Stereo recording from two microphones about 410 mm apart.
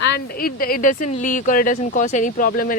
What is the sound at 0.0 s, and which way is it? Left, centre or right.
Speech, left.